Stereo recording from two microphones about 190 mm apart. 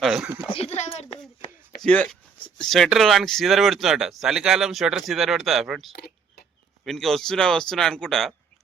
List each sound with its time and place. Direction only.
0.0 s speech: centre (ahead or behind)
0.4 s speech: 30° left (ahead or behind)
1.8 s speech: 5° left (ahead or behind)
5.9 s a sound: 55° left (ahead or behind)
6.8 s speech: centre (ahead or behind)